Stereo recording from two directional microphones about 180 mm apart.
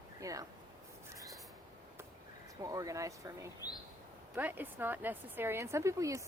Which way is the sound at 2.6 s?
20° right (ahead or behind).